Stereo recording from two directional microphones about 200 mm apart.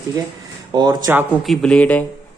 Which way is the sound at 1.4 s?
Centre (ahead or behind).